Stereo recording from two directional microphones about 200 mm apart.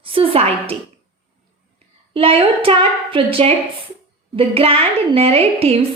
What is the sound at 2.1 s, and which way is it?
A woman's voice, 30° right (ahead or behind).